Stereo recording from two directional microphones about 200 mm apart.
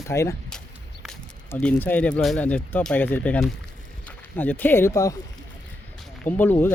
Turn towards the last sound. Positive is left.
turn(degrees=10)  # may be behind; listen again after turning